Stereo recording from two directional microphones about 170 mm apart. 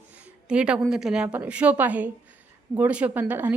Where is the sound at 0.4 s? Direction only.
5° right (ahead or behind).